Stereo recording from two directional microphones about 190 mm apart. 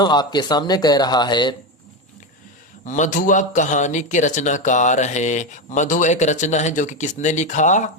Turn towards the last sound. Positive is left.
turn(degrees=40)  # may be behind; listen again after turning